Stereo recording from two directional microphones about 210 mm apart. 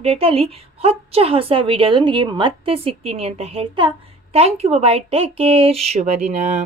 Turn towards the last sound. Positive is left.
turn(degrees=-35)  # may be behind; listen again after turning